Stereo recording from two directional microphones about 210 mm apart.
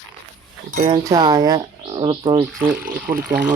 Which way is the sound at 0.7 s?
35° right (ahead or behind).